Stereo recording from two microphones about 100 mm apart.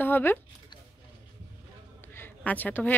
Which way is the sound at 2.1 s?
20° left (ahead or behind).